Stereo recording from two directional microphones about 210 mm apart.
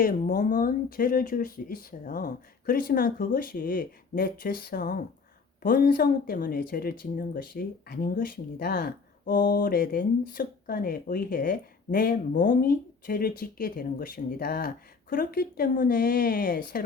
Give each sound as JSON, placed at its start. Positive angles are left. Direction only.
{"t": 0.0, "sound": "speech", "side_deg": 45}